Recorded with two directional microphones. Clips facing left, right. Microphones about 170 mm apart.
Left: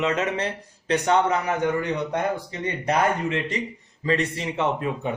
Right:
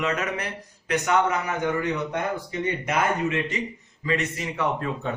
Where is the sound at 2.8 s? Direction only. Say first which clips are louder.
Left 4 dB; 35° left (ahead or behind).